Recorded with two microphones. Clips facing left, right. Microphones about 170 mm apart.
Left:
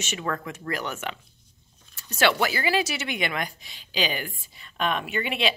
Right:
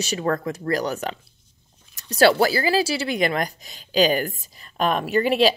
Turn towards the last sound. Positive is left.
turn(degrees=-40)  # may be behind; listen again after turning